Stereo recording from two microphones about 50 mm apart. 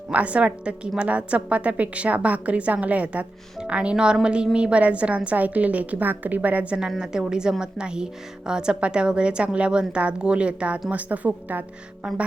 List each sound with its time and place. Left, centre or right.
0.1 s speech: right
7.0 s a woman's voice: centre; by 11.6 s right
12.0 s a woman's voice: centre